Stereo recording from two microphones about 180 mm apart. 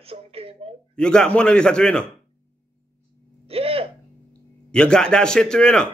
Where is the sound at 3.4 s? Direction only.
35° right (ahead or behind).